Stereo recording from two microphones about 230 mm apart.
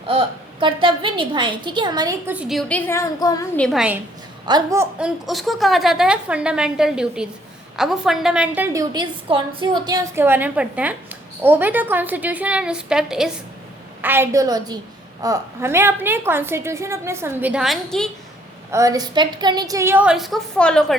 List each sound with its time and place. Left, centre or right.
0.1 s a woman's voice: right; by 3.6 s centre
3.6 s a woman's voice: centre
4.4 s a woman's voice: centre
18.7 s a woman's voice: centre